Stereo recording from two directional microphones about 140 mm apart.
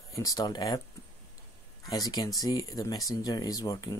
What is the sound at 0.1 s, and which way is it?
Speech, 25° left (ahead or behind).